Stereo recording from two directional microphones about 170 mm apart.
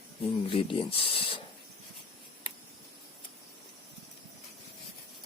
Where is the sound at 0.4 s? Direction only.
30° left (ahead or behind).